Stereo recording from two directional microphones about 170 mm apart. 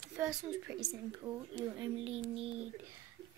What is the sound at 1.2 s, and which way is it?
Speech, 20° right (ahead or behind).